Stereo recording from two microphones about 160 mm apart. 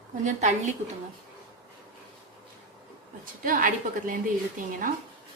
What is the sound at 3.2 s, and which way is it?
Speech, 60° right (ahead or behind).